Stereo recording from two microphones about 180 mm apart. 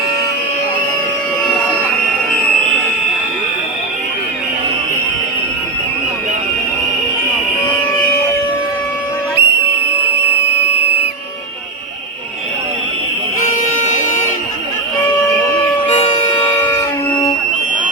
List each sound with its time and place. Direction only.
9.4 s whistle: 65° right (ahead or behind)
15.9 s music: 30° left (ahead or behind)